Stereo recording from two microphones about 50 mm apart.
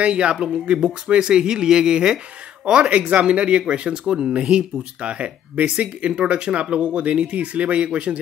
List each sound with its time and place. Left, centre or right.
0.0 s speech: right